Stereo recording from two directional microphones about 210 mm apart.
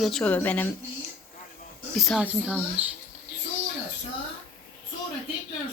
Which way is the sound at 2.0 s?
5° right (ahead or behind).